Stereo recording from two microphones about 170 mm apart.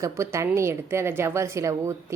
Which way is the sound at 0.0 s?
15° right (ahead or behind).